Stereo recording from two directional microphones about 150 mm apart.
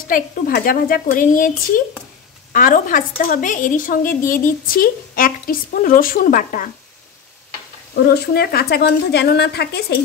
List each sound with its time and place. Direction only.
0.1 s a woman's voice: 75° left (ahead or behind)
2.5 s a woman's voice: 65° left (ahead or behind)
7.9 s a woman's voice: 90° left